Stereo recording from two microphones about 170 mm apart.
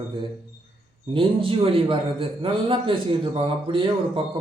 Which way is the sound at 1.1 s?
30° right (ahead or behind).